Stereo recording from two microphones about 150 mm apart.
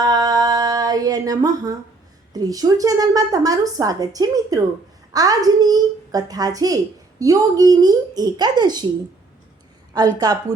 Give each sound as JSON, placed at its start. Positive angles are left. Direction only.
{"t": 0.0, "sound": "a sound", "side_deg": -25}
{"t": 2.3, "sound": "a woman's voice", "side_deg": -25}
{"t": 9.9, "sound": "a woman's voice", "side_deg": -25}